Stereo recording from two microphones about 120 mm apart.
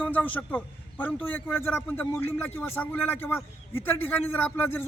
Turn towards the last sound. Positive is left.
turn(degrees=15)  # may be behind; listen again after turning